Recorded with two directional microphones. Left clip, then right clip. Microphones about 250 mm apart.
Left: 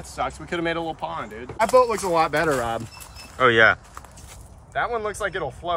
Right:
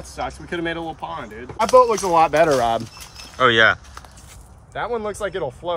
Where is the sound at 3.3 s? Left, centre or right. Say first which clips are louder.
Right 1 dB; centre.